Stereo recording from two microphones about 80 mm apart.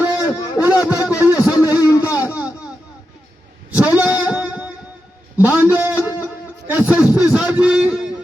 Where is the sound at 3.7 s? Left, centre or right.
Centre.